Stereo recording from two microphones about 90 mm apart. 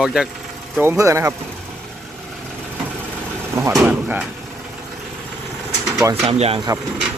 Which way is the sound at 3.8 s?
15° right (ahead or behind).